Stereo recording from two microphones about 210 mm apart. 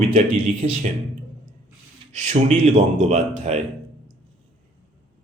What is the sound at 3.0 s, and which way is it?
Speech, 30° right (ahead or behind).